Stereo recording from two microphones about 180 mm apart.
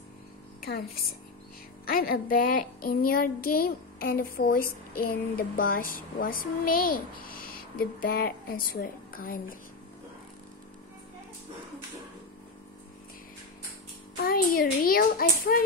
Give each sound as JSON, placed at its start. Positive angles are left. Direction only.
{"t": 1.9, "sound": "child singing", "side_deg": 55}
{"t": 14.1, "sound": "child singing", "side_deg": 55}